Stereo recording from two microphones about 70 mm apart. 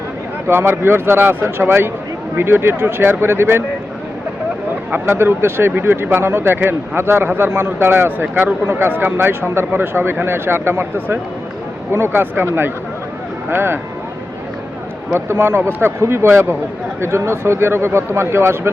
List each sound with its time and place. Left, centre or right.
0.4 s speech: right
4.9 s speech: right
5.1 s speech: right
15.1 s speech: right